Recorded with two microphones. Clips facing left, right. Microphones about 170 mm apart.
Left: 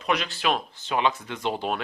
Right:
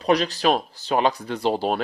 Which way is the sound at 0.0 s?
35° right (ahead or behind).